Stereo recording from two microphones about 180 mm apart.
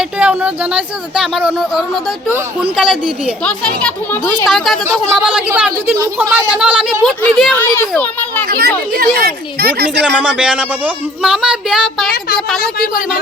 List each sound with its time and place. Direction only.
0.0 s a child's voice: 5° right (ahead or behind); by 8.3 s 10° left (ahead or behind)
8.4 s speech: 55° right (ahead or behind)
10.2 s speech: 5° right (ahead or behind)